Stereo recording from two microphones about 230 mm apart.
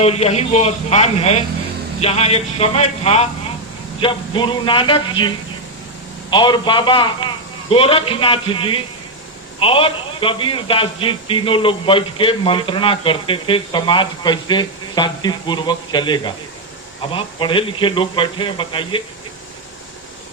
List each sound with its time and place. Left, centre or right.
0.0 s a man's voice: left
6.3 s a man's voice: centre